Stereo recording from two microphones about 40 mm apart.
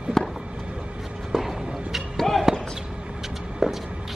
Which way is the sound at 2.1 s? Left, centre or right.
Centre.